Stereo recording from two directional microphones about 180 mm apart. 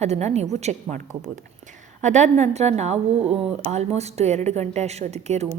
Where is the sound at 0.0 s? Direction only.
40° right (ahead or behind).